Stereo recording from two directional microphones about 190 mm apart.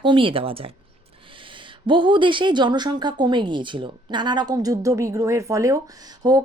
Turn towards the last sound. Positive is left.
turn(degrees=-20)  # may be behind; listen again after turning